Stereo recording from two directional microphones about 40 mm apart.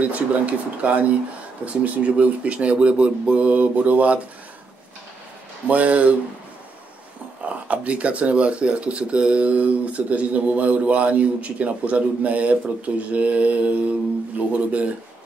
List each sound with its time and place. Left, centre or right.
0.0 s speech: right
5.7 s speech: right
7.4 s speech: right